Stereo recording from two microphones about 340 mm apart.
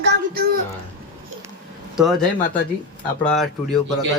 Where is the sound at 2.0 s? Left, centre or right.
Centre.